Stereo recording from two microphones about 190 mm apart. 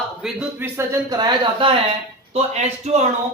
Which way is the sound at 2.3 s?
35° right (ahead or behind).